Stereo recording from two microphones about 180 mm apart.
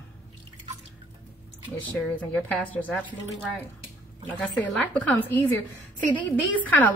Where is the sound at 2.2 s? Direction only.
10° left (ahead or behind).